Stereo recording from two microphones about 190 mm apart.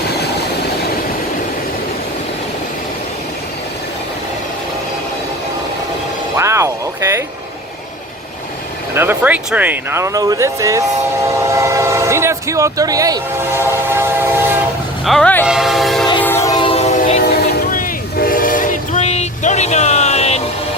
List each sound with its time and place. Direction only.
6.3 s music: 15° right (ahead or behind)
9.0 s speech: 10° right (ahead or behind)
11.5 s train: 15° right (ahead or behind)
15.0 s speech: 5° left (ahead or behind)
15.4 s train: centre (ahead or behind)
16.2 s train: 15° left (ahead or behind); by 20.4 s 35° left (ahead or behind)